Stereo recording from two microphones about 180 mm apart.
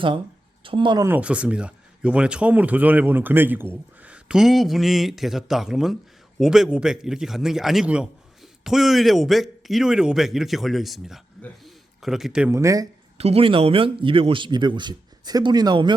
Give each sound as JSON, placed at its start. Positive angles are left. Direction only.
{"t": 0.6, "sound": "speech", "side_deg": -30}
{"t": 1.0, "sound": "speech", "side_deg": -10}
{"t": 13.1, "sound": "a man's voice", "side_deg": -35}